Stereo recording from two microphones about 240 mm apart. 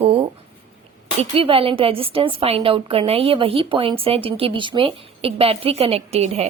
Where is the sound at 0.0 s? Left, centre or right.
Right.